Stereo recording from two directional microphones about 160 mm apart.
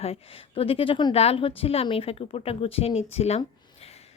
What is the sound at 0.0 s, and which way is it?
Speech, 35° left (ahead or behind).